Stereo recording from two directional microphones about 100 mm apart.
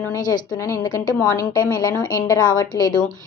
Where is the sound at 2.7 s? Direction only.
30° left (ahead or behind).